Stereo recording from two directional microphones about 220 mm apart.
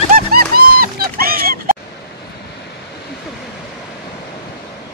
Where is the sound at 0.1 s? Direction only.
40° right (ahead or behind).